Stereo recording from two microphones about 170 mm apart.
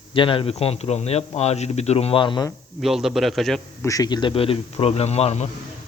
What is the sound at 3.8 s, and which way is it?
A man's voice, 20° left (ahead or behind).